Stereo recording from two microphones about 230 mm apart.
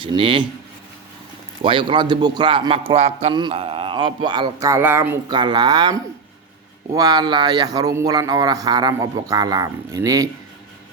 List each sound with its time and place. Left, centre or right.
0.0 s a man's voice: right
1.6 s a man's voice: right